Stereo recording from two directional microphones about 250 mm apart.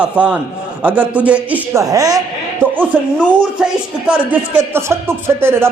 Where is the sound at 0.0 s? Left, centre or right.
Centre.